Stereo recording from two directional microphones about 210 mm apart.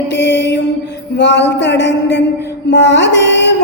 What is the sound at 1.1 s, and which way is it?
A woman's voice, 55° left (ahead or behind).